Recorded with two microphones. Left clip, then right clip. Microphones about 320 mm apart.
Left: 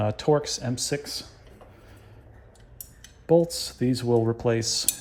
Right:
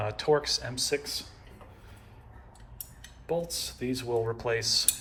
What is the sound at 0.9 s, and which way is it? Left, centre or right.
Speech, left.